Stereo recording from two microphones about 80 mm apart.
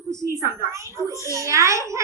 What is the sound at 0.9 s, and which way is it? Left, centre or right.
Speech, left.